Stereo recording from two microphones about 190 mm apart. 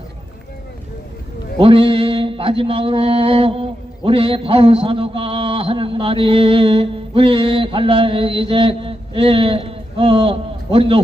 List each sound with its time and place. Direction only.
1.5 s mantra: 30° right (ahead or behind)